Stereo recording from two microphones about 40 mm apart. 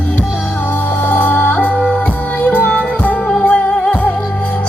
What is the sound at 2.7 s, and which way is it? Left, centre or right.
Music, left.